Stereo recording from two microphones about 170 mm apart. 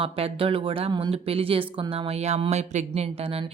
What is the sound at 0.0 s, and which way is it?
Speech, 30° right (ahead or behind).